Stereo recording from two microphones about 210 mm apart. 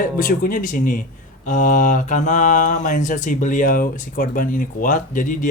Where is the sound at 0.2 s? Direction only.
40° left (ahead or behind).